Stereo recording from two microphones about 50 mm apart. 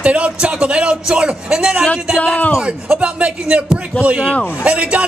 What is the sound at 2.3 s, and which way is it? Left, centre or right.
Speech, left.